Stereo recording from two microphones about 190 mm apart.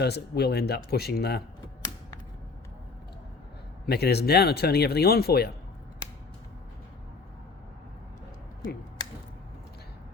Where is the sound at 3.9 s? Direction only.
60° left (ahead or behind).